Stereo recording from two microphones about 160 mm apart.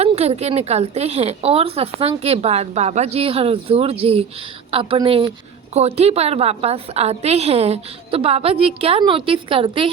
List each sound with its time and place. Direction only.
0.0 s a woman's voice: 40° right (ahead or behind)